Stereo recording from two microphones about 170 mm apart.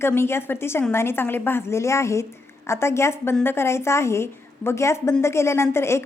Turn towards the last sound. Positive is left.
turn(degrees=15)  # may be behind; listen again after turning